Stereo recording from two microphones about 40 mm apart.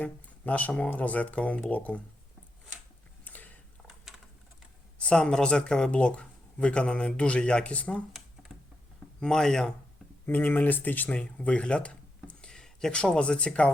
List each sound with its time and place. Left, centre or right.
0.0 s a sound: left
0.9 s speech: left
3.2 s a sound: left
4.9 s speech: left
9.2 s speech: centre
10.2 s speech: left
11.1 s speech: left